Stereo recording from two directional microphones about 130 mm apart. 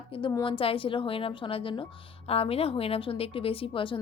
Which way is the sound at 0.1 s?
40° left (ahead or behind).